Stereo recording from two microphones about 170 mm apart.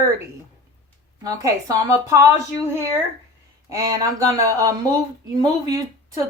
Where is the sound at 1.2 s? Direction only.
20° right (ahead or behind).